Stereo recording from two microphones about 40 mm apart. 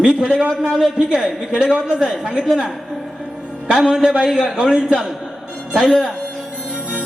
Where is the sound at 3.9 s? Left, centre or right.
Centre.